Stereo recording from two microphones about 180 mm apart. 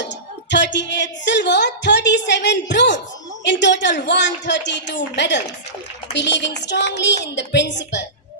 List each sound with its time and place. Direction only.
0.5 s a woman's voice: 80° left